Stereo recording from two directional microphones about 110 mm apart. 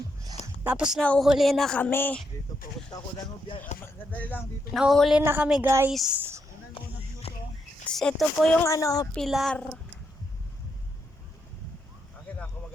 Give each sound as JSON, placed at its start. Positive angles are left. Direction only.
{"t": 0.6, "sound": "speech", "side_deg": -10}
{"t": 1.8, "sound": "speech", "side_deg": 20}
{"t": 2.9, "sound": "speech", "side_deg": 40}
{"t": 4.1, "sound": "speech", "side_deg": 15}
{"t": 4.7, "sound": "speech", "side_deg": 0}
{"t": 5.2, "sound": "a woman's voice", "side_deg": -20}
{"t": 5.9, "sound": "speech", "side_deg": 0}
{"t": 6.7, "sound": "a sound", "side_deg": 65}
{"t": 7.9, "sound": "speech", "side_deg": 5}
{"t": 8.6, "sound": "speech", "side_deg": 30}
{"t": 9.1, "sound": "speech", "side_deg": 0}
{"t": 12.3, "sound": "a sound", "side_deg": 10}